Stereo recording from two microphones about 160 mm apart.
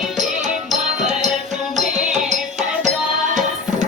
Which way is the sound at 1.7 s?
45° right (ahead or behind).